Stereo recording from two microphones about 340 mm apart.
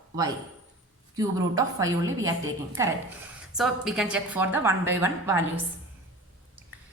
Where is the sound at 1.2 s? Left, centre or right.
Centre.